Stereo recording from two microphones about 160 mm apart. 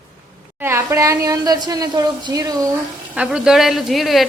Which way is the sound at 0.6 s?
15° right (ahead or behind).